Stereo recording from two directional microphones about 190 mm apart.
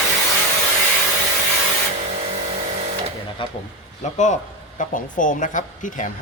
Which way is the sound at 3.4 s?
25° left (ahead or behind).